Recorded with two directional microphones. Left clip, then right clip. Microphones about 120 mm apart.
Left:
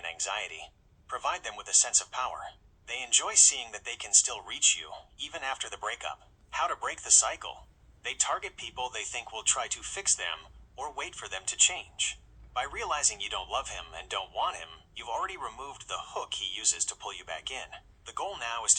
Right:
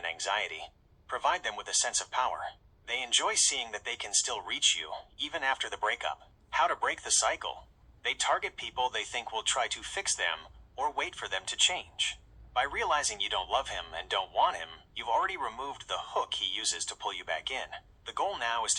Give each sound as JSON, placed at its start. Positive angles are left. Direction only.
{"t": 0.0, "sound": "a man's voice", "side_deg": -30}